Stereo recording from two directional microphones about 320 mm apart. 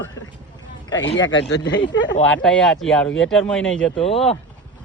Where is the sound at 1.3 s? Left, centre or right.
Left.